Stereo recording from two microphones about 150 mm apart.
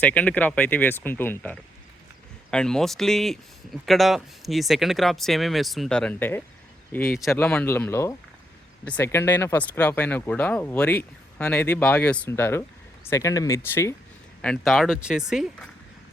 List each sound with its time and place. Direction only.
0.0 s speech: 10° left (ahead or behind)
14.4 s speech: 5° left (ahead or behind)